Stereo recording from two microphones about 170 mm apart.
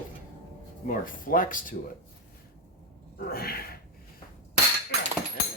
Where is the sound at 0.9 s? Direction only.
55° left (ahead or behind).